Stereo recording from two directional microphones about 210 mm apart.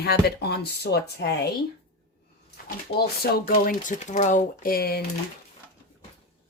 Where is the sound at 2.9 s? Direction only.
50° left (ahead or behind).